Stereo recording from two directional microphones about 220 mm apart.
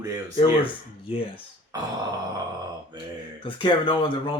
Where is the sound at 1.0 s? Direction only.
25° left (ahead or behind).